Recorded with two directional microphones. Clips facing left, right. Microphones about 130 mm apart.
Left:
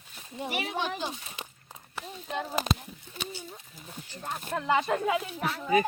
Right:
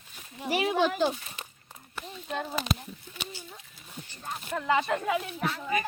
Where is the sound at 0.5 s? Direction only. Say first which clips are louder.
Right 7 dB; 90° right.